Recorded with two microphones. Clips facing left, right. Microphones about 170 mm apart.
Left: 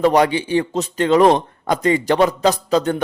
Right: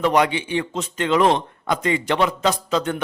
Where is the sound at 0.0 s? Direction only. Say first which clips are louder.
Left 4 dB; 35° left (ahead or behind).